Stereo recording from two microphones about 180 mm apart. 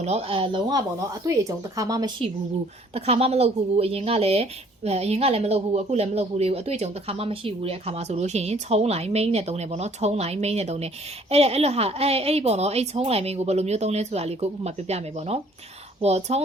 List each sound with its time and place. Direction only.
0.0 s speech: 35° right (ahead or behind)
2.9 s speech: 35° right (ahead or behind)